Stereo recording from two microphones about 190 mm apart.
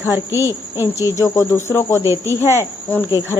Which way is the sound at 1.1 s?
15° left (ahead or behind).